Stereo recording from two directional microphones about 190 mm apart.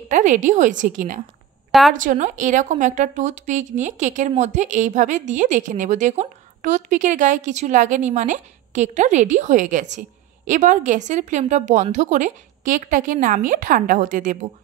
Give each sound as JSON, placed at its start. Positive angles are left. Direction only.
{"t": 0.1, "sound": "a woman's voice", "side_deg": -40}
{"t": 1.7, "sound": "speech", "side_deg": 0}
{"t": 2.0, "sound": "a woman's voice", "side_deg": -40}